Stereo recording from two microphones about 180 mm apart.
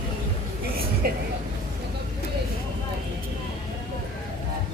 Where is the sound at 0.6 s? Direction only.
55° right (ahead or behind).